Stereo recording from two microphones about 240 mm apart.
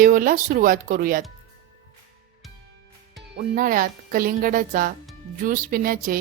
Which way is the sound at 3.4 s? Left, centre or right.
Right.